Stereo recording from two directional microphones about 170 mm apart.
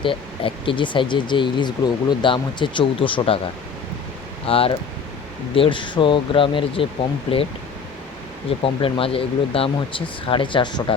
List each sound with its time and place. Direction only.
0.0 s speech: 30° left (ahead or behind)
4.4 s speech: 35° left (ahead or behind)
8.6 s speech: 35° left (ahead or behind)